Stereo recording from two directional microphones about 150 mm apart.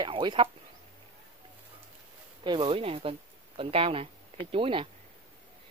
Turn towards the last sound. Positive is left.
turn(degrees=-35)  # may be behind; listen again after turning